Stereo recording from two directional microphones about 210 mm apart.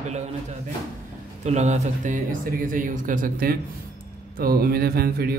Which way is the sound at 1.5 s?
35° right (ahead or behind).